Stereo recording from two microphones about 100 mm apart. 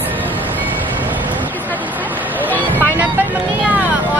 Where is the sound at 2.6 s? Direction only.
20° right (ahead or behind).